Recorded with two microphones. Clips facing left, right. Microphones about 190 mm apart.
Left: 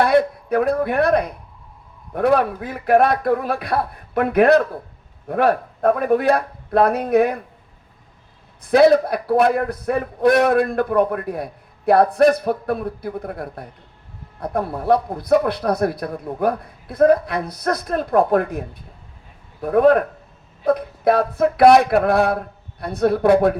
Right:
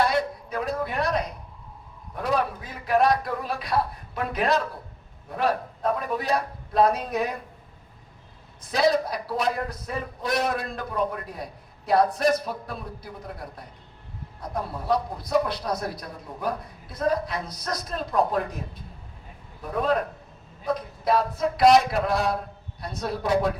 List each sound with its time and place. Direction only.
0.0 s a man's voice: 60° left (ahead or behind)
8.7 s a man's voice: 60° left (ahead or behind)